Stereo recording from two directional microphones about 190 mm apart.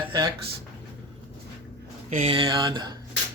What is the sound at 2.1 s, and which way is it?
Speech, 35° right (ahead or behind).